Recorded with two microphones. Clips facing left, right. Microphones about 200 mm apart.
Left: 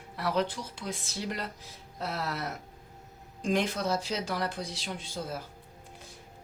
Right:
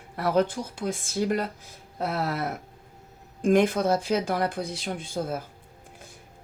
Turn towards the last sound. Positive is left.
turn(degrees=-55)  # may be behind; listen again after turning